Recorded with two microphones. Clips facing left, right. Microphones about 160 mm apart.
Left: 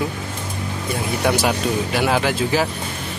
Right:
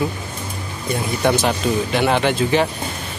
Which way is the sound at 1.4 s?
5° left (ahead or behind).